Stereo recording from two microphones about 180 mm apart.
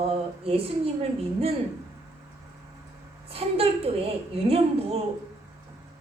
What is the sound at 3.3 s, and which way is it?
A woman's voice, 35° right (ahead or behind).